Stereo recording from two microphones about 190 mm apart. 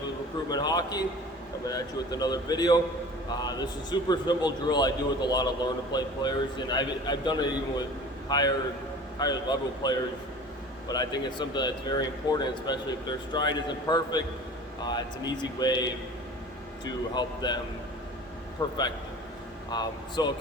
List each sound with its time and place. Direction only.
0.5 s speech: 20° left (ahead or behind)
18.6 s a man's voice: 20° left (ahead or behind)